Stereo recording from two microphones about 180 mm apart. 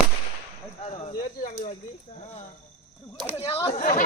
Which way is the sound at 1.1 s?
50° left (ahead or behind).